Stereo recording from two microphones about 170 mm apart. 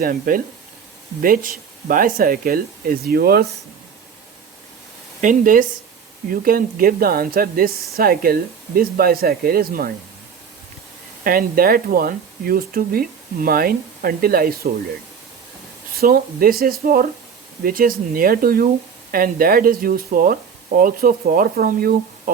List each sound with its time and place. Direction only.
0.0 s speech: 55° right (ahead or behind)
5.2 s speech: 50° right (ahead or behind)
11.2 s speech: 60° right (ahead or behind)
16.0 s speech: 60° right (ahead or behind)